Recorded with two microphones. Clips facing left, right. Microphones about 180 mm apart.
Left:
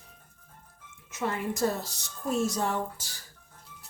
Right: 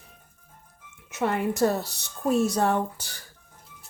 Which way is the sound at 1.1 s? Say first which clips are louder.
Right 5 dB; 70° right (ahead or behind).